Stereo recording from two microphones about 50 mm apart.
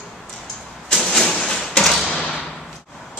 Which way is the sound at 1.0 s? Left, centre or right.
Centre.